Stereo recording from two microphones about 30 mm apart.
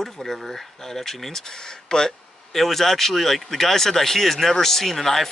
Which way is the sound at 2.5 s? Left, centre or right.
Centre.